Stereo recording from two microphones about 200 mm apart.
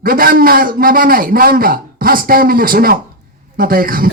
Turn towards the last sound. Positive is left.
turn(degrees=-45)  # may be behind; listen again after turning